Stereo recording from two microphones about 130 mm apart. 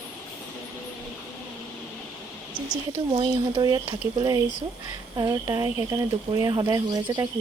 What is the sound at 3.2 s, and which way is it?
Speech, 40° right (ahead or behind).